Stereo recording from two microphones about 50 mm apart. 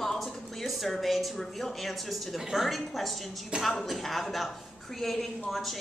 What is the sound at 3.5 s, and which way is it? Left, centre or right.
Speech, right.